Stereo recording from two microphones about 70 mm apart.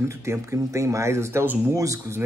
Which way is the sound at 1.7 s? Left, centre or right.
Right.